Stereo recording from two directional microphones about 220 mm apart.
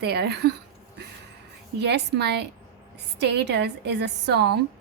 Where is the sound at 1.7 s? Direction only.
50° right (ahead or behind).